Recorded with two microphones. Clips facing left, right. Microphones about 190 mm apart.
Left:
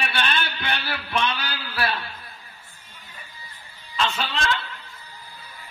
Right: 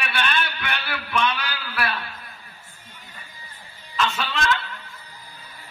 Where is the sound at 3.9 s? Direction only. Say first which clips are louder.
Right 1 dB; 30° left (ahead or behind).